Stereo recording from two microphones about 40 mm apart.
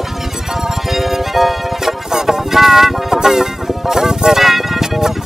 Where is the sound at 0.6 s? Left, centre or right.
Centre.